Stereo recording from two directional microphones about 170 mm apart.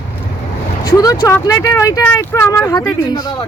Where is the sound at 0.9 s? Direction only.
25° left (ahead or behind).